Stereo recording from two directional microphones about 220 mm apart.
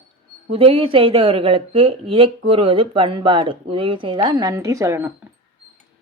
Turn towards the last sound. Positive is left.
turn(degrees=-10)  # may be behind; listen again after turning